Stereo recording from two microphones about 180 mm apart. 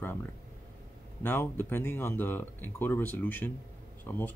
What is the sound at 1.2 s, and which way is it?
Speech, 10° left (ahead or behind).